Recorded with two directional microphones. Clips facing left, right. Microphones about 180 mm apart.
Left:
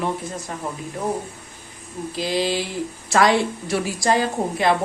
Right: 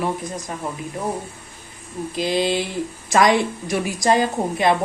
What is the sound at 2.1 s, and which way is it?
A woman's voice, 20° right (ahead or behind).